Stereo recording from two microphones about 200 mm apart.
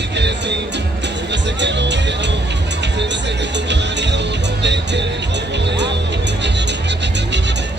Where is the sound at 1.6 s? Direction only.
60° right (ahead or behind).